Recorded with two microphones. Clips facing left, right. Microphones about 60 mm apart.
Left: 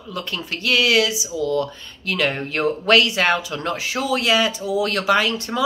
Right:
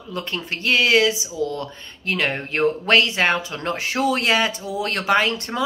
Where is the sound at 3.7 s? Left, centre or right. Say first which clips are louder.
Right 2 dB; right.